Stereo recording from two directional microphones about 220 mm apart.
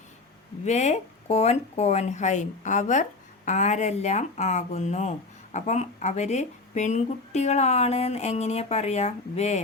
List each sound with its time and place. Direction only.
0.6 s speech: 30° left (ahead or behind)